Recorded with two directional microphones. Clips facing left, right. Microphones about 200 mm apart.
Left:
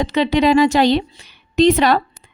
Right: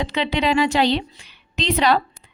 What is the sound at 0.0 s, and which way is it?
A woman's voice, 45° left (ahead or behind).